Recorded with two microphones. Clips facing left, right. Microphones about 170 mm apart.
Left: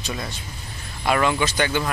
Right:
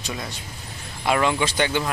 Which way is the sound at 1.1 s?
20° right (ahead or behind).